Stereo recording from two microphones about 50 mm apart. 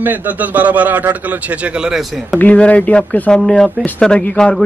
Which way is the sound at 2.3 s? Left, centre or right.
Left.